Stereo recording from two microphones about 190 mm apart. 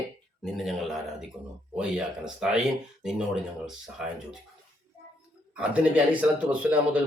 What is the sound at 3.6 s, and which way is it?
Speech, 5° right (ahead or behind).